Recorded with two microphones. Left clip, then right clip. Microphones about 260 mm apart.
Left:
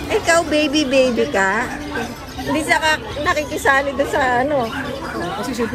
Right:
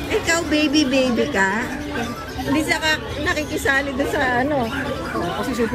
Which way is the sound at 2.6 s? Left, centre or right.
Centre.